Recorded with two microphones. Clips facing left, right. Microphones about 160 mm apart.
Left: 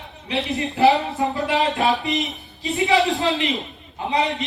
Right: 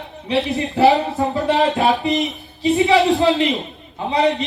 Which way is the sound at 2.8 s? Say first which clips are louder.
Right 3 dB; 20° right (ahead or behind).